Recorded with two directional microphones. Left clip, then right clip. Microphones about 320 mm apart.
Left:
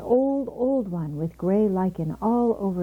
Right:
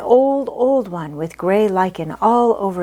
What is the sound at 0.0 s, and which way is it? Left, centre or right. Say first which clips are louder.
Speech: right 9 dB; right.